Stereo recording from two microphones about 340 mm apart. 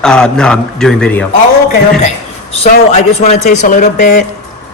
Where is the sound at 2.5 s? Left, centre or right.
Centre.